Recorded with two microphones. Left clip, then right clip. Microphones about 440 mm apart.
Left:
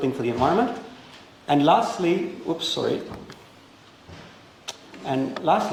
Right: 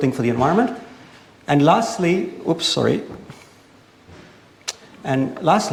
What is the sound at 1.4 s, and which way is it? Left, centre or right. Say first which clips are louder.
Speech: right 3 dB; right.